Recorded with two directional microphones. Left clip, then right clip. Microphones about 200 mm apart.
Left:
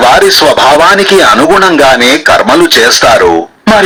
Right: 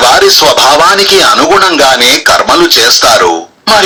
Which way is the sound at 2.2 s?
30° left (ahead or behind).